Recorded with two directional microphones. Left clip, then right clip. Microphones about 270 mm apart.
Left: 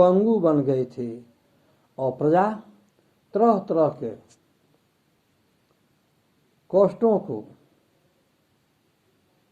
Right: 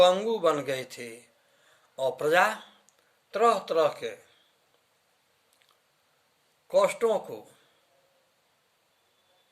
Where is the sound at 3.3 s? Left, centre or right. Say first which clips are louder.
Left 4 dB; right.